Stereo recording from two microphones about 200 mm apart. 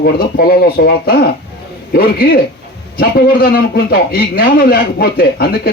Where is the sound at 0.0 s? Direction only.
50° left (ahead or behind).